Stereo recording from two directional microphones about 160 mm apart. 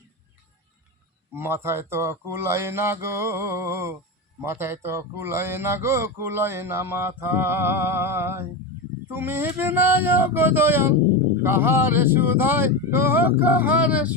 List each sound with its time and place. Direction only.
1.3 s speech: 15° right (ahead or behind)